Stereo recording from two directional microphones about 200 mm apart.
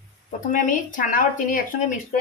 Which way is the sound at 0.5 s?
40° left (ahead or behind).